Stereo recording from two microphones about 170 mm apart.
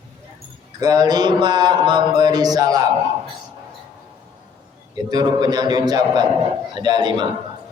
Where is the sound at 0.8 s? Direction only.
20° right (ahead or behind).